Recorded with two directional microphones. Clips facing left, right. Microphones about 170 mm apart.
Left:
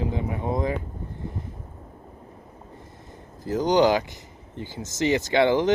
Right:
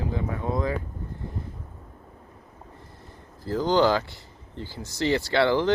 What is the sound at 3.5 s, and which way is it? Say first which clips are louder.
Speech: left 2 dB; 20° left (ahead or behind).